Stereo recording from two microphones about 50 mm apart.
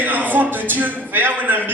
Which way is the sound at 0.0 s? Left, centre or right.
Right.